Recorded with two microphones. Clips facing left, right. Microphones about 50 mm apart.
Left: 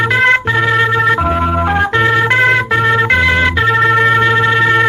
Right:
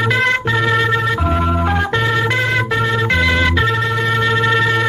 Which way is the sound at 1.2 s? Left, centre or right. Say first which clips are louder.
Left 3 dB; left.